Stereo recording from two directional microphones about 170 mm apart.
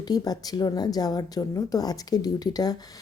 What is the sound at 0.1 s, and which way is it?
A woman's voice, 20° left (ahead or behind).